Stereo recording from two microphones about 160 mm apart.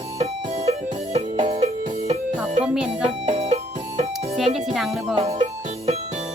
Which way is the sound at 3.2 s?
40° right (ahead or behind).